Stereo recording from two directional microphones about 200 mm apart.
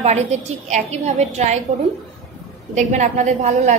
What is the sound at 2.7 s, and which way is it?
A woman's voice, 35° right (ahead or behind).